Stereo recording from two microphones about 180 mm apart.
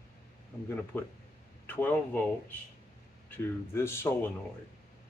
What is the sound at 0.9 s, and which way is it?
A man's voice, 10° left (ahead or behind).